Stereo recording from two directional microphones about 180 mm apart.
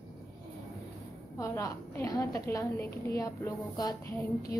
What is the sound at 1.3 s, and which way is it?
A woman's voice, 15° left (ahead or behind).